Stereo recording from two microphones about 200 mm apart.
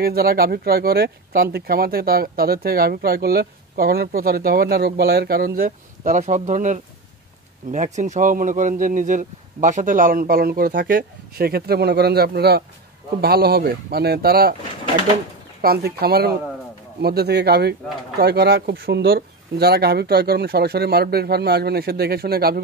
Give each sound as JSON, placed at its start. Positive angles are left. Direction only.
{"t": 0.0, "sound": "speech", "side_deg": -50}
{"t": 6.0, "sound": "speech", "side_deg": -35}
{"t": 15.6, "sound": "speech", "side_deg": -50}